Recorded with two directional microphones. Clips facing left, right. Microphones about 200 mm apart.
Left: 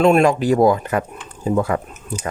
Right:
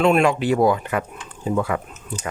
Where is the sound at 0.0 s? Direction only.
40° left (ahead or behind).